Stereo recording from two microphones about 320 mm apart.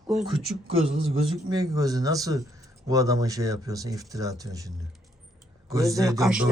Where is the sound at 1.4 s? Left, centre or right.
Centre.